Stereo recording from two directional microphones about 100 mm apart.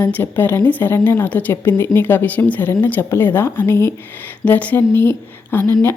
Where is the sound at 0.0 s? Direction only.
20° left (ahead or behind).